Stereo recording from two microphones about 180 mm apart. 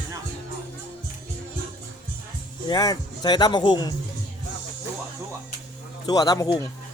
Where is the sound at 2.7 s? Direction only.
20° left (ahead or behind).